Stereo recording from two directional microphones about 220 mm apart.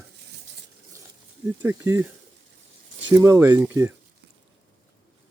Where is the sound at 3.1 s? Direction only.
15° right (ahead or behind).